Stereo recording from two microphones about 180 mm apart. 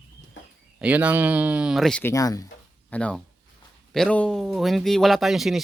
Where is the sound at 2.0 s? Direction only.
20° left (ahead or behind).